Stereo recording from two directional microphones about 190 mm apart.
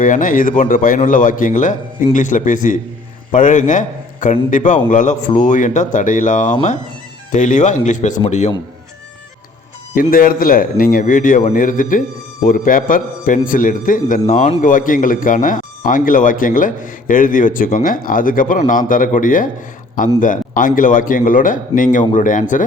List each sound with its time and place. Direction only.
0.0 s a man's voice: 45° left (ahead or behind)
9.9 s a man's voice: 50° left (ahead or behind)